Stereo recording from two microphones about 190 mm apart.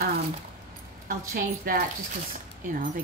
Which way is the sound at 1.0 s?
50° right (ahead or behind).